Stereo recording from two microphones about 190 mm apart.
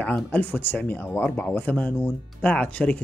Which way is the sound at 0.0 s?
10° left (ahead or behind).